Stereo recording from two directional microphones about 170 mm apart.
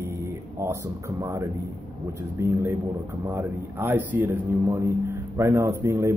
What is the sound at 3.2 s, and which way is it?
Speech, 10° right (ahead or behind).